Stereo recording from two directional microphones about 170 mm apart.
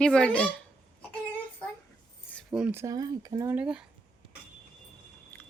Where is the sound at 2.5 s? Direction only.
10° right (ahead or behind).